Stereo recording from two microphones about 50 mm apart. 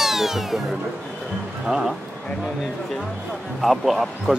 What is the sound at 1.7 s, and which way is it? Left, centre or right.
Speech, centre.